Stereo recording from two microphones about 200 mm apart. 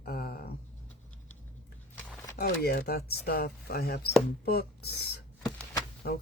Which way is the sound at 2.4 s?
50° left (ahead or behind).